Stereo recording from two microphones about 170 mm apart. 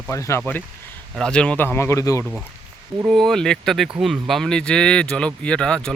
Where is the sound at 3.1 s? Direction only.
Centre (ahead or behind).